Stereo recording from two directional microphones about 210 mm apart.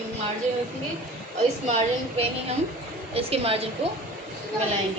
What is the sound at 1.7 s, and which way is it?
A woman's voice, 30° right (ahead or behind).